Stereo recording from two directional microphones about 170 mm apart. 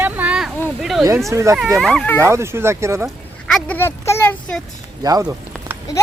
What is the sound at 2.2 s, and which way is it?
Speech, 15° right (ahead or behind).